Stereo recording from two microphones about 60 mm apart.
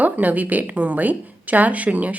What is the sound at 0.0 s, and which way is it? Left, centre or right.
A woman's voice, right.